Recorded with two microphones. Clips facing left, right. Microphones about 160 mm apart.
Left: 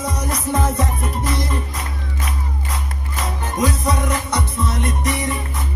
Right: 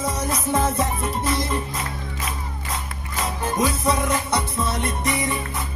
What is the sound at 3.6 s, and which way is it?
Music, 30° right (ahead or behind).